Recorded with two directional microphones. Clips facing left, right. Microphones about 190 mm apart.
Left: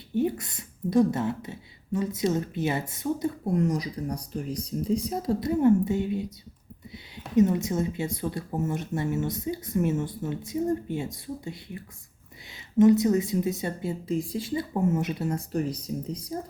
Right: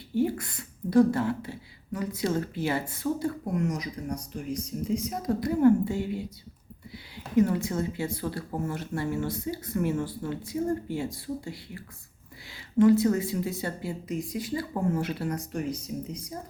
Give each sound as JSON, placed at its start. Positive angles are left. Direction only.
{"t": 0.1, "sound": "speech", "side_deg": 20}
{"t": 3.5, "sound": "speech", "side_deg": 35}
{"t": 7.3, "sound": "speech", "side_deg": 20}